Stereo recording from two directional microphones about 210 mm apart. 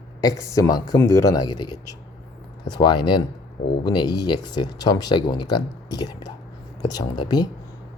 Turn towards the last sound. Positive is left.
turn(degrees=20)  # may be behind; listen again after turning